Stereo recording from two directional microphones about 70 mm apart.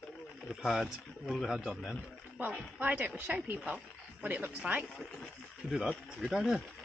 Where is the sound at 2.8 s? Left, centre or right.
Right.